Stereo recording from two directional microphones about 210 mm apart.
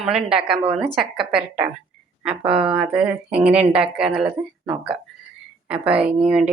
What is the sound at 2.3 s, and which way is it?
Speech, 25° right (ahead or behind).